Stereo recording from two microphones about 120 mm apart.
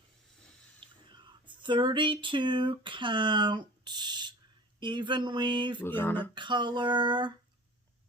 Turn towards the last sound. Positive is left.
turn(degrees=-40)  # may be behind; listen again after turning